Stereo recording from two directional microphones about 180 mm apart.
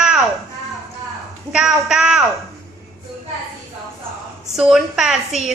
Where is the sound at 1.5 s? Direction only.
5° right (ahead or behind).